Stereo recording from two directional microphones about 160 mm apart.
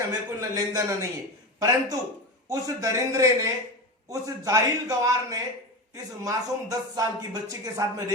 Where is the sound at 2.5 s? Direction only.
20° right (ahead or behind).